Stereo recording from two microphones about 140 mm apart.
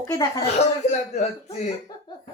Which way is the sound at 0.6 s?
55° left (ahead or behind).